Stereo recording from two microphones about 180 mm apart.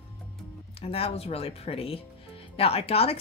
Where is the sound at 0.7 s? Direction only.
35° left (ahead or behind).